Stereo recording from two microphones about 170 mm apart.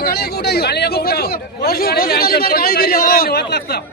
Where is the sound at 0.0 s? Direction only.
70° left (ahead or behind).